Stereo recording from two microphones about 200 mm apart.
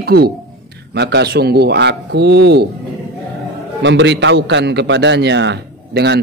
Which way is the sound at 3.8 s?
60° right (ahead or behind).